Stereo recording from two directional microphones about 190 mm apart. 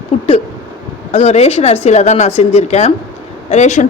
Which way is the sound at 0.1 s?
30° left (ahead or behind).